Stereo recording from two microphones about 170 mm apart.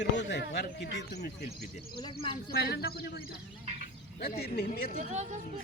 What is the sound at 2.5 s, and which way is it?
Speech, 70° left (ahead or behind).